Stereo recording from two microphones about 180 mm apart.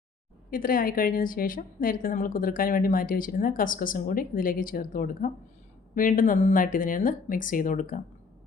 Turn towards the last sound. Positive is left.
turn(degrees=45)  # may be behind; listen again after turning